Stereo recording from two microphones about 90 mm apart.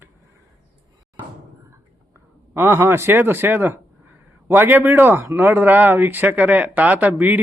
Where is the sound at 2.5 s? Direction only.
25° right (ahead or behind).